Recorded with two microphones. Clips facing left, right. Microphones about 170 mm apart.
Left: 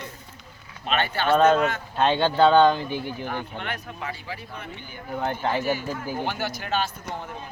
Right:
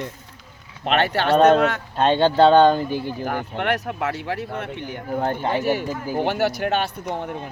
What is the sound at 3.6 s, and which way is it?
Speech, 75° right (ahead or behind).